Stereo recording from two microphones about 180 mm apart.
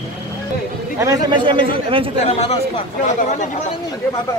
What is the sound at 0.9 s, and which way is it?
Speech, 20° right (ahead or behind).